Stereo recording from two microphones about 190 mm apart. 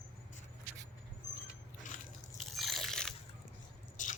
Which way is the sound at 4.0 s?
40° left (ahead or behind).